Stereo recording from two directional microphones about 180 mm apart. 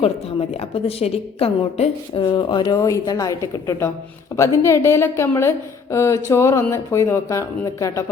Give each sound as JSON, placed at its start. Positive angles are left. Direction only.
{"t": 0.0, "sound": "a woman's voice", "side_deg": 35}